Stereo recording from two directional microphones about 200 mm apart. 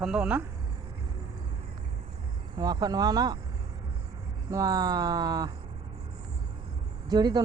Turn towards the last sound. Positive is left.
turn(degrees=-20)  # may be behind; listen again after turning